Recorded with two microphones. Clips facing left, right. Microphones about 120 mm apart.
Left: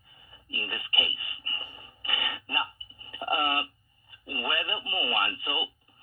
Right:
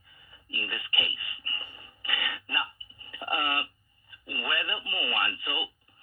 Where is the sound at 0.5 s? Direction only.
30° left (ahead or behind).